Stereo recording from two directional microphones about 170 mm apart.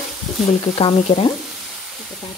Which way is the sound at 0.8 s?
30° left (ahead or behind).